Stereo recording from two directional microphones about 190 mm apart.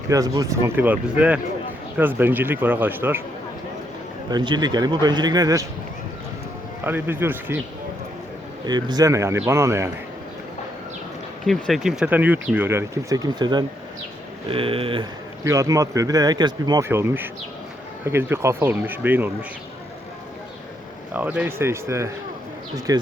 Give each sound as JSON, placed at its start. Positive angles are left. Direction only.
{"t": 0.1, "sound": "speech", "side_deg": -15}
{"t": 4.3, "sound": "speech", "side_deg": -20}
{"t": 6.8, "sound": "speech", "side_deg": -10}
{"t": 8.6, "sound": "speech", "side_deg": -20}
{"t": 11.4, "sound": "speech", "side_deg": 0}
{"t": 15.4, "sound": "speech", "side_deg": -15}
{"t": 16.9, "sound": "speech", "side_deg": -10}
{"t": 21.1, "sound": "speech", "side_deg": -10}